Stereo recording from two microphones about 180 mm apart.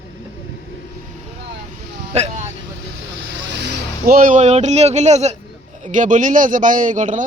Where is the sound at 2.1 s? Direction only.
40° right (ahead or behind).